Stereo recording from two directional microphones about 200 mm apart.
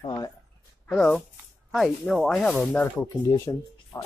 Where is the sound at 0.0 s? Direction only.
20° left (ahead or behind).